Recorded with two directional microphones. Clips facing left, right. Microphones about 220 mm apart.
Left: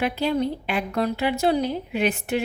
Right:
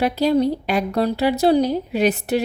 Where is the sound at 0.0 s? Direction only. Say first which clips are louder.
Right 6 dB; 40° right (ahead or behind).